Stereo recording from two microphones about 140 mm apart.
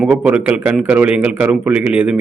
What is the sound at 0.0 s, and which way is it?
A man's voice, 10° right (ahead or behind).